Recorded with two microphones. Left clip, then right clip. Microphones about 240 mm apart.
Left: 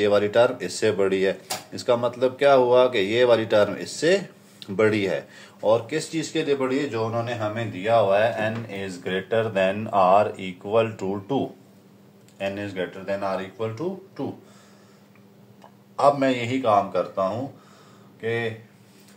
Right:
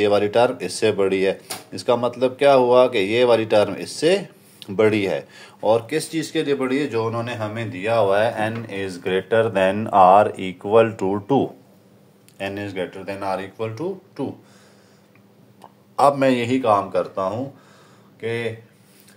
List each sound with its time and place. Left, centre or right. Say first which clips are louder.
0.0 s speech: right 2 dB; right
16.0 s speech: right 3 dB; right